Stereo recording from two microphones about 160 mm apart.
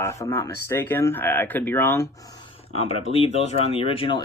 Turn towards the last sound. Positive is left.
turn(degrees=35)  # may be behind; listen again after turning